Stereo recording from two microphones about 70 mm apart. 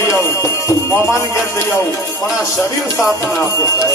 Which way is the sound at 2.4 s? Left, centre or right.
Left.